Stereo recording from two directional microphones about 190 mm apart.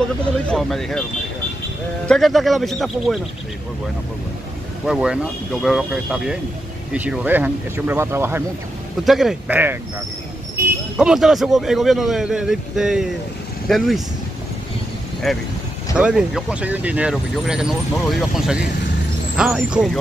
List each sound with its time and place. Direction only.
0.5 s speech: centre (ahead or behind)
2.0 s speech: centre (ahead or behind)
4.8 s speech: 5° right (ahead or behind)
9.0 s speech: centre (ahead or behind)
11.0 s speech: centre (ahead or behind)
15.3 s speech: centre (ahead or behind)